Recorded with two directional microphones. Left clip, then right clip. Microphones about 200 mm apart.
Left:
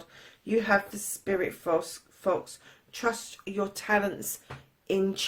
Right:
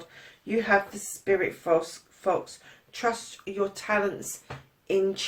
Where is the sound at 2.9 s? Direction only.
50° left (ahead or behind).